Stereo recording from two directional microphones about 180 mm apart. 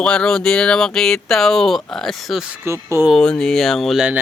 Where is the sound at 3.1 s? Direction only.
5° left (ahead or behind).